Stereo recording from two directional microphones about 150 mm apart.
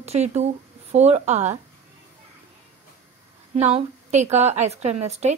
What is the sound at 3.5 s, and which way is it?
A woman's voice, 45° right (ahead or behind).